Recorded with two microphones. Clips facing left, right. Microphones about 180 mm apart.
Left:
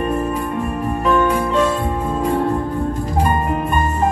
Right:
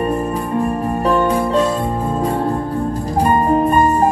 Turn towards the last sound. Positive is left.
turn(degrees=-35)  # may be behind; listen again after turning